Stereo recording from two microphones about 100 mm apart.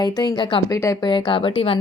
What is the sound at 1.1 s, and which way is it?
Speech, 55° left (ahead or behind).